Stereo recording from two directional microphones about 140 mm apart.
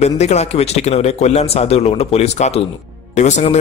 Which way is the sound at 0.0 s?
50° left (ahead or behind).